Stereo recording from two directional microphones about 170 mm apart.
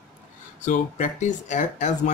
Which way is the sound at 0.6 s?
45° left (ahead or behind).